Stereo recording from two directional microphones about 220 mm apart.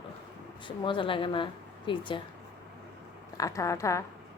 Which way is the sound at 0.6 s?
20° left (ahead or behind).